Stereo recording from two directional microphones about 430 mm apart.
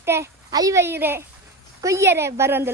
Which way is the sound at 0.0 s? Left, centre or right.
Centre.